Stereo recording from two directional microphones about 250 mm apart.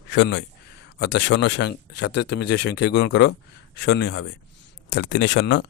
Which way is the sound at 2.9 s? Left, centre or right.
Left.